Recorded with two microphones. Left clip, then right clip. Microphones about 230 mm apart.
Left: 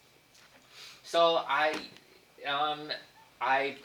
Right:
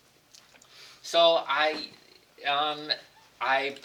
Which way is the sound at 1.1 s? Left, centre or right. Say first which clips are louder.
Right 4 dB; right.